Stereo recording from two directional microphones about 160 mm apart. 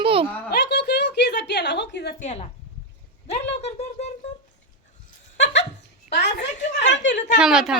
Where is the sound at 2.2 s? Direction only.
45° left (ahead or behind).